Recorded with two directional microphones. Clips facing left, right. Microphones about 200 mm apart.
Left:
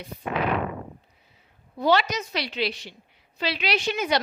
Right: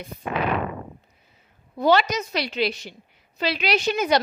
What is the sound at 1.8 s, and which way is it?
A woman's voice, 45° right (ahead or behind).